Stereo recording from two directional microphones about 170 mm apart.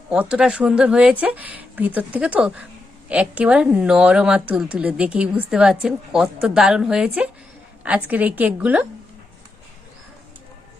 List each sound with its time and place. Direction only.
0.1 s a woman's voice: 5° right (ahead or behind)